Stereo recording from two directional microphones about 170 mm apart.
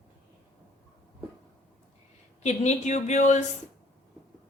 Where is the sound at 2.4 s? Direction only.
45° left (ahead or behind).